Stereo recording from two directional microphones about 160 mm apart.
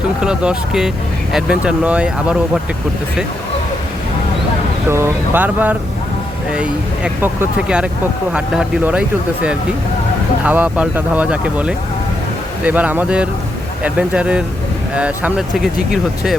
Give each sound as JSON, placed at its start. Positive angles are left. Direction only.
{"t": 0.2, "sound": "speech", "side_deg": -5}
{"t": 4.9, "sound": "speech", "side_deg": -15}
{"t": 8.3, "sound": "speech", "side_deg": -5}